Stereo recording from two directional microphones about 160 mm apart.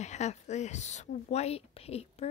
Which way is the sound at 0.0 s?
45° left (ahead or behind).